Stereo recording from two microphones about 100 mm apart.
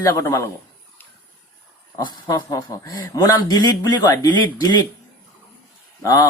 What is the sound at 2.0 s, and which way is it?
A man's voice, 45° left (ahead or behind).